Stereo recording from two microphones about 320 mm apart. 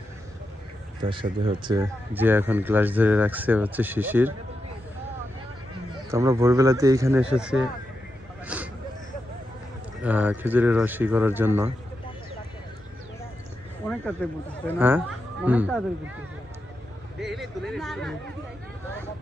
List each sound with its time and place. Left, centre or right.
1.0 s speech: centre
6.1 s speech: centre
8.4 s a sound: centre
10.0 s speech: centre
13.8 s speech: centre
14.8 s speech: centre
17.2 s speech: centre